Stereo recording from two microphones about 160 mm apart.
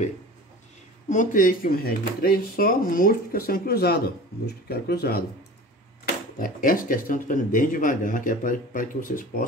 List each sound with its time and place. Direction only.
1.0 s speech: 50° left (ahead or behind); by 5.2 s 75° left (ahead or behind)
6.3 s speech: 60° left (ahead or behind)